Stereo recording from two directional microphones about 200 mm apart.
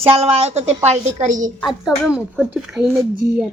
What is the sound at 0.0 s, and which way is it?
Speech, 30° right (ahead or behind).